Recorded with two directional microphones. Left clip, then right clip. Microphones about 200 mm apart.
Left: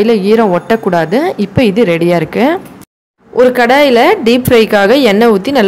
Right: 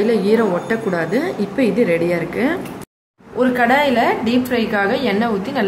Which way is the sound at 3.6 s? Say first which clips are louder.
Left 5 dB; 45° left (ahead or behind).